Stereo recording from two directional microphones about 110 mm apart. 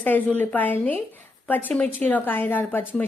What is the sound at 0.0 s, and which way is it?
A woman's voice, 15° left (ahead or behind).